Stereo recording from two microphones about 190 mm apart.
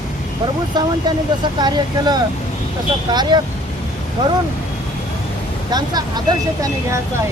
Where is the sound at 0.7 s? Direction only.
20° right (ahead or behind).